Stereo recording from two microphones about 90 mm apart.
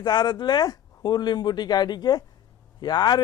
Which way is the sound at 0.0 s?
50° left (ahead or behind).